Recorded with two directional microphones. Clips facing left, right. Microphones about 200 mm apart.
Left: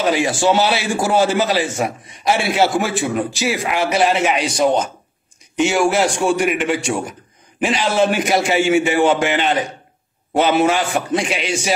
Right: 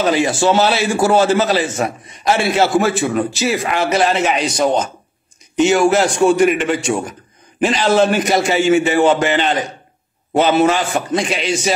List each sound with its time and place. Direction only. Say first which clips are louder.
0.0 s a man's voice: right 2 dB; 10° left (ahead or behind)